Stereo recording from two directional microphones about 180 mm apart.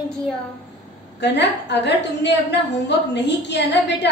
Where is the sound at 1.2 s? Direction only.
75° left (ahead or behind).